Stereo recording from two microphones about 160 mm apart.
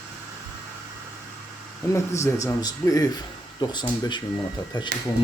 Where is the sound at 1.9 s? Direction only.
15° left (ahead or behind).